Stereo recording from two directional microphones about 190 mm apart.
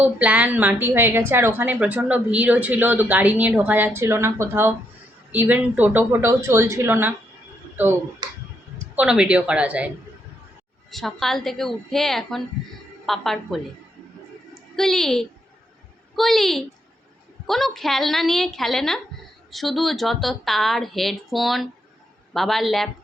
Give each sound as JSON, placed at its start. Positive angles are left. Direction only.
{"t": 0.0, "sound": "a woman's voice", "side_deg": -5}
{"t": 8.2, "sound": "tick", "side_deg": -25}
{"t": 9.0, "sound": "speech", "side_deg": -5}
{"t": 10.9, "sound": "a woman's voice", "side_deg": 0}